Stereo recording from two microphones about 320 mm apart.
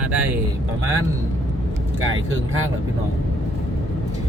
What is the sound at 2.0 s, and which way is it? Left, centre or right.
Speech, right.